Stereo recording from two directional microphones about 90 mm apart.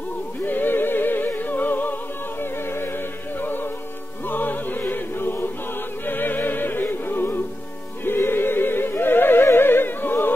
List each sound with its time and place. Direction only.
0.4 s music: 20° left (ahead or behind)
3.3 s music: 20° left (ahead or behind)